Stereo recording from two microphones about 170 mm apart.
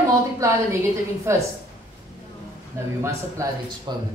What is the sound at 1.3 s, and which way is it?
Speech, 15° right (ahead or behind).